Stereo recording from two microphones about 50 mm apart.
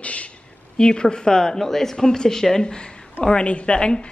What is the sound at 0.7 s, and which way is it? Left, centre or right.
A woman's voice, centre.